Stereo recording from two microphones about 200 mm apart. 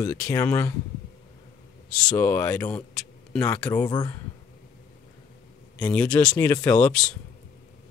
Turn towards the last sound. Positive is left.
turn(degrees=10)  # may be behind; listen again after turning